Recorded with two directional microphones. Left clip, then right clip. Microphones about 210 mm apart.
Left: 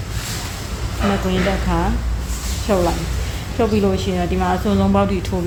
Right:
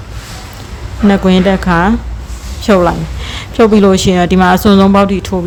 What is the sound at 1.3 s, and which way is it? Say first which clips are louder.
A woman's voice: right 9 dB; 40° right (ahead or behind).